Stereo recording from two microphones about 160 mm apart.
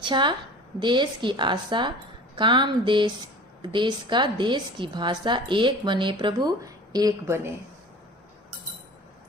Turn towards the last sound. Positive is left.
turn(degrees=-15)  # may be behind; listen again after turning